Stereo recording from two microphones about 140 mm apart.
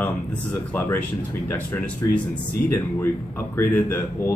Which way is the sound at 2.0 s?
25° left (ahead or behind).